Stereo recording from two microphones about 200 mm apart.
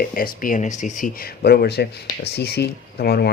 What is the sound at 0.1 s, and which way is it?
Speech, 45° left (ahead or behind).